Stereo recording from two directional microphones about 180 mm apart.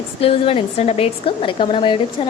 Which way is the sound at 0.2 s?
30° left (ahead or behind).